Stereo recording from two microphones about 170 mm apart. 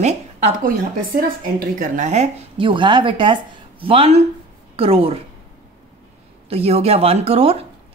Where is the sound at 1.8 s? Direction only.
45° right (ahead or behind).